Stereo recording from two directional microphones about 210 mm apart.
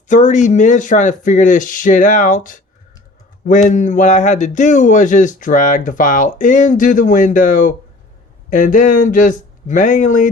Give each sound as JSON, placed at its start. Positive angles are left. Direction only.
{"t": 0.1, "sound": "speech", "side_deg": 35}